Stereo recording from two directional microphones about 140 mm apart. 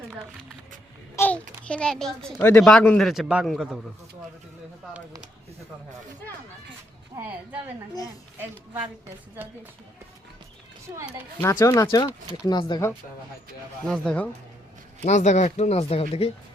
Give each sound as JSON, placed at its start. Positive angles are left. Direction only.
{"t": 1.1, "sound": "babbling", "side_deg": 10}
{"t": 2.4, "sound": "speech", "side_deg": 10}
{"t": 3.1, "sound": "a man's voice", "side_deg": -5}
{"t": 8.4, "sound": "a woman's voice", "side_deg": -15}
{"t": 11.5, "sound": "speech", "side_deg": 25}
{"t": 13.8, "sound": "speech", "side_deg": 5}
{"t": 15.0, "sound": "speech", "side_deg": 55}